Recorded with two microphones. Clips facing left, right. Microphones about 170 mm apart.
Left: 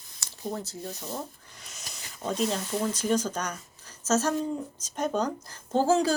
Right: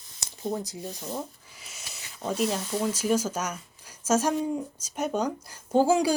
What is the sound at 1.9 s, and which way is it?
A woman's voice, 5° right (ahead or behind).